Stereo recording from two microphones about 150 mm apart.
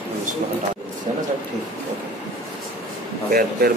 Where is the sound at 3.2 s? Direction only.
80° right.